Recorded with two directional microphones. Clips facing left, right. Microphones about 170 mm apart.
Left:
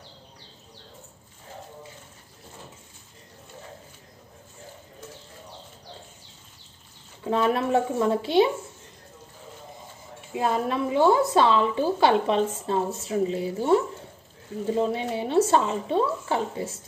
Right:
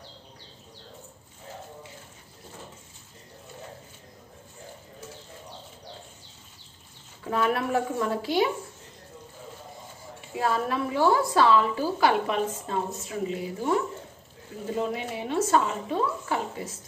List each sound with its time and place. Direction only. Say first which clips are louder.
7.2 s a woman's voice: left 3 dB; 25° left (ahead or behind)
10.3 s a woman's voice: left 2 dB; 20° left (ahead or behind)
14.8 s a woman's voice: left 3 dB; 30° left (ahead or behind)